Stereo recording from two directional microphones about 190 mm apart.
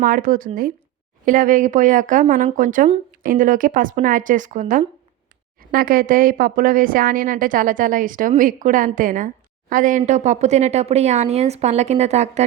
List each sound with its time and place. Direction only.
0.0 s speech: 45° right (ahead or behind)